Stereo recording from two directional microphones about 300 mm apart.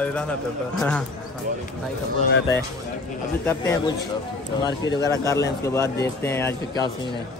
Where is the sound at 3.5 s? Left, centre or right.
Centre.